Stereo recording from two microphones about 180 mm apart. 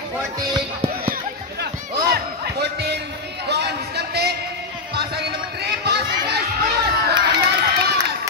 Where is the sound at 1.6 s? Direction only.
65° right (ahead or behind).